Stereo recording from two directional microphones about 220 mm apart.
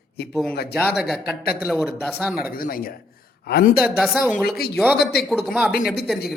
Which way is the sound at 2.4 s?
40° left (ahead or behind).